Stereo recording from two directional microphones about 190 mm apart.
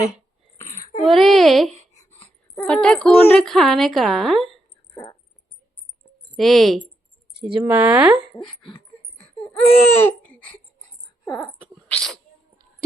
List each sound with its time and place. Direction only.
0.6 s wail: 10° left (ahead or behind)
1.0 s speech: centre (ahead or behind)
6.3 s speech: centre (ahead or behind)
7.6 s speech: 10° right (ahead or behind)
8.4 s dog: 25° left (ahead or behind)
9.4 s baby cry: 10° left (ahead or behind)
11.3 s speech: centre (ahead or behind)